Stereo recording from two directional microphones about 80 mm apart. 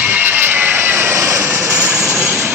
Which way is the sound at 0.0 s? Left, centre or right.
Right.